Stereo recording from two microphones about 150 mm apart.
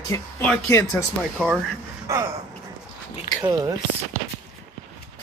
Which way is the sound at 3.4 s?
25° right (ahead or behind).